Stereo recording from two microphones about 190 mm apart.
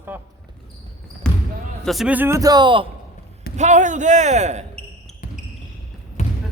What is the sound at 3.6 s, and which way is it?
A man's voice, 40° right (ahead or behind).